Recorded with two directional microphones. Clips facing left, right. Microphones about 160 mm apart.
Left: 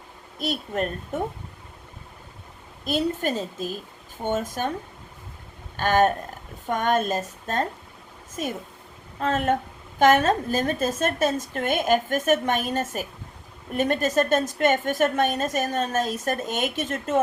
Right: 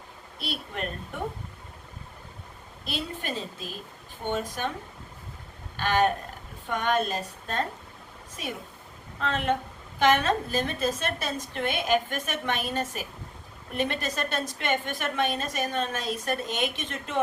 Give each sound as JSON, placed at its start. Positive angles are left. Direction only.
{"t": 0.3, "sound": "a woman's voice", "side_deg": 45}
{"t": 2.8, "sound": "a woman's voice", "side_deg": 45}
{"t": 5.7, "sound": "a woman's voice", "side_deg": 45}